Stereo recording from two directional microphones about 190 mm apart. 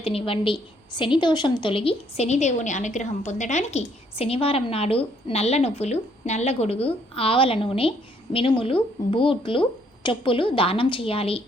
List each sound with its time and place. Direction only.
0.0 s a woman's voice: 30° left (ahead or behind)